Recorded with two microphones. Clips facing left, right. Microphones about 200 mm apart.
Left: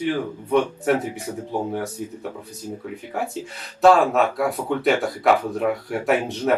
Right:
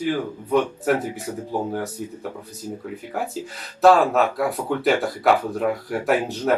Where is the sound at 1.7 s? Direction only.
Centre (ahead or behind).